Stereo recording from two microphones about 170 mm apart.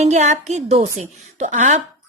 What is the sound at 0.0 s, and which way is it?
A woman's voice, 40° right (ahead or behind).